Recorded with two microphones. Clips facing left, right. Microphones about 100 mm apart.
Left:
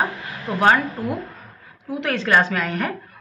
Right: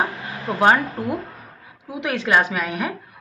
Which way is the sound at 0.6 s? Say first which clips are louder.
Even; 20° right (ahead or behind).